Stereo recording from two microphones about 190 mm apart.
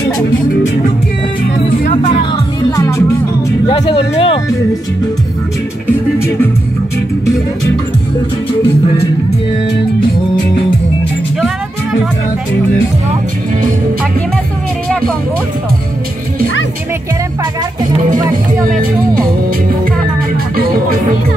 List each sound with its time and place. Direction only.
2.7 s music: 15° left (ahead or behind)
3.6 s speech: 25° left (ahead or behind)